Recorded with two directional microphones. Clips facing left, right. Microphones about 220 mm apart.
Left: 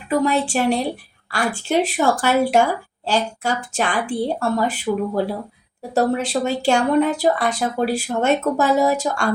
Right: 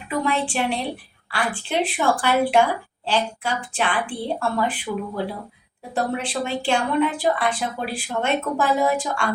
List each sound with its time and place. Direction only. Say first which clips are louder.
0.1 s speech: left 5 dB; 40° left (ahead or behind)